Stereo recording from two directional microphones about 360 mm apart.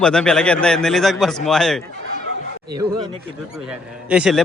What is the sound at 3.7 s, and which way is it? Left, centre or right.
Speech, centre.